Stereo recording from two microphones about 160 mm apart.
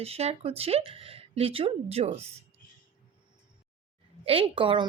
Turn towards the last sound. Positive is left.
turn(degrees=-30)  # may be behind; listen again after turning